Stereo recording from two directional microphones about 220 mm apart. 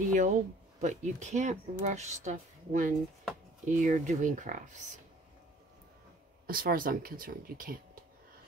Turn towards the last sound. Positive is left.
turn(degrees=-40)  # may be behind; listen again after turning